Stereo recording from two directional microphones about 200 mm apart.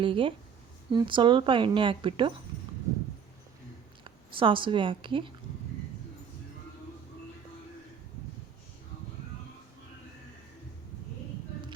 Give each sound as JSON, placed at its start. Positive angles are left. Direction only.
{"t": 0.0, "sound": "speech", "side_deg": -25}
{"t": 4.0, "sound": "a woman's voice", "side_deg": -25}